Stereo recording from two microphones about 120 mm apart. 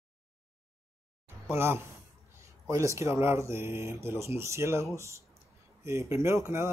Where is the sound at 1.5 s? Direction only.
20° right (ahead or behind).